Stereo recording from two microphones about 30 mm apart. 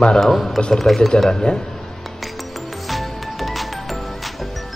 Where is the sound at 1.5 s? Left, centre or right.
Left.